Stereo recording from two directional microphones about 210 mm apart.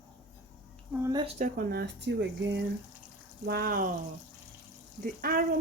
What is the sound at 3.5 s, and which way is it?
Speech, 45° right (ahead or behind).